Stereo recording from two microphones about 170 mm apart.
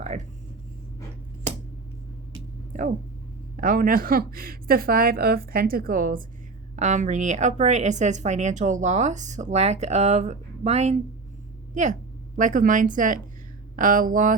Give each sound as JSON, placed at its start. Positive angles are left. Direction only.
{"t": 2.7, "sound": "a woman's voice", "side_deg": -50}